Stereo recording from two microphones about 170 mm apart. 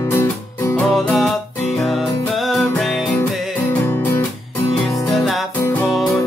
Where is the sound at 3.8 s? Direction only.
15° left (ahead or behind).